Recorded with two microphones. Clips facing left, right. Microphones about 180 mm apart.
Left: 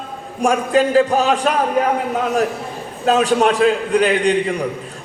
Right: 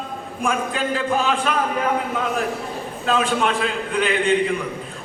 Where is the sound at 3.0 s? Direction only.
40° left (ahead or behind).